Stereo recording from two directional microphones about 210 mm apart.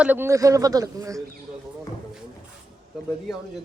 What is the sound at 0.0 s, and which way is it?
Speech, 10° right (ahead or behind).